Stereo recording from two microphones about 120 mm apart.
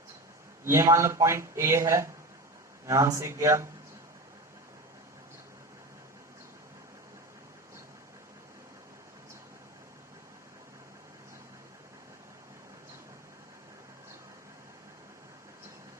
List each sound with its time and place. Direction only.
0.6 s speech: 20° right (ahead or behind)